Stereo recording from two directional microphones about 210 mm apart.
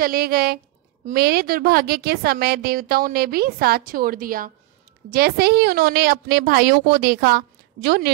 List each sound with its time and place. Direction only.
0.0 s a woman's voice: 45° right (ahead or behind)